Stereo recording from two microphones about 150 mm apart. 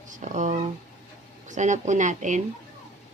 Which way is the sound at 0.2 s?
55° right (ahead or behind).